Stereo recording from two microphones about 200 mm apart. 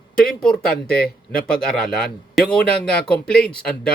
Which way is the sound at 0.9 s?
5° left (ahead or behind).